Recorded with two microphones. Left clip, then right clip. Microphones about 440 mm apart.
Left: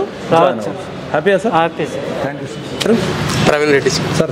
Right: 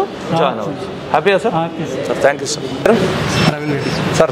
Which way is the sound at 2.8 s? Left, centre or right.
Right.